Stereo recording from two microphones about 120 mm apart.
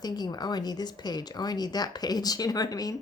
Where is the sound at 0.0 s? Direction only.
35° left (ahead or behind).